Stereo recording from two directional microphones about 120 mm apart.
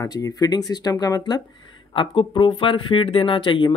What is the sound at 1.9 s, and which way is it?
Speech, 45° left (ahead or behind).